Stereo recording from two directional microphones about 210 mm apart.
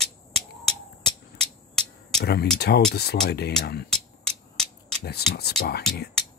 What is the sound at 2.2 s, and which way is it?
Speech, 50° left (ahead or behind).